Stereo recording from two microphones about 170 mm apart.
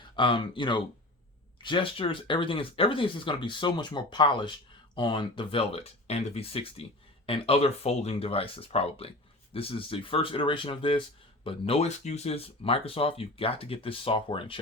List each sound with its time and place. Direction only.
0.2 s speech: 30° left (ahead or behind)